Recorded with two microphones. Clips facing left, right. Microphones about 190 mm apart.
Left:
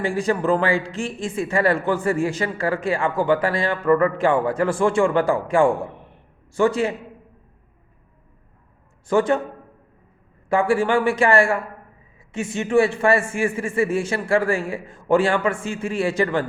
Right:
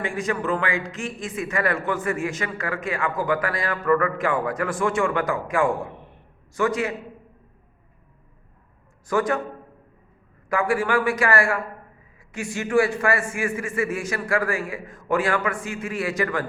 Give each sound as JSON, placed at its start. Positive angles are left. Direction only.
{"t": 0.0, "sound": "speech", "side_deg": 30}
{"t": 9.0, "sound": "speech", "side_deg": 25}
{"t": 10.5, "sound": "speech", "side_deg": 25}